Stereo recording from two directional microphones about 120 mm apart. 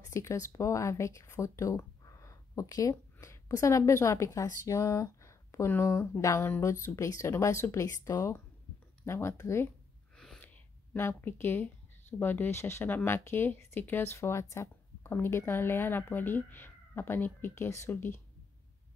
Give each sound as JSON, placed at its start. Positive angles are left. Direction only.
{"t": 0.1, "sound": "speech", "side_deg": 25}
{"t": 10.1, "sound": "gasp", "side_deg": 5}
{"t": 10.4, "sound": "speech", "side_deg": 15}